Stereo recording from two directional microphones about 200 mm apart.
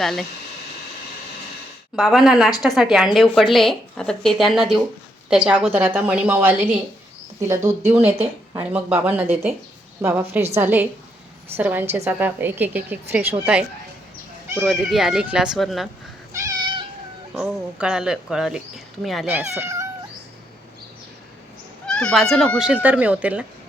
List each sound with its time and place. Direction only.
0.0 s speech: centre (ahead or behind)
2.0 s a woman's voice: centre (ahead or behind)
7.9 s a woman's voice: 10° right (ahead or behind)
16.3 s cat: 15° right (ahead or behind)
17.3 s speech: 5° right (ahead or behind)
19.3 s speech: 10° right (ahead or behind)
21.8 s speech: 5° left (ahead or behind)